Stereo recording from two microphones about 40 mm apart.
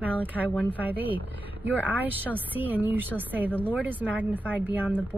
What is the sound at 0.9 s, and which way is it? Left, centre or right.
Speech, right.